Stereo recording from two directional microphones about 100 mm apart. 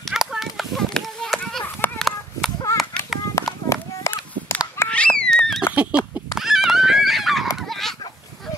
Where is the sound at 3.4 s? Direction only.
30° left (ahead or behind).